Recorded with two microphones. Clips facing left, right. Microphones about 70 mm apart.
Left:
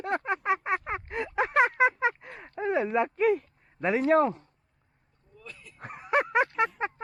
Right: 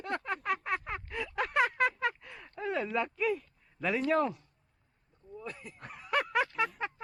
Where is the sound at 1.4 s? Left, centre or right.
Left.